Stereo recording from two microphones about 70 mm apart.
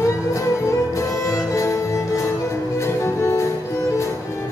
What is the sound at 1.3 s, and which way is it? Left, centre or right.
Music, left.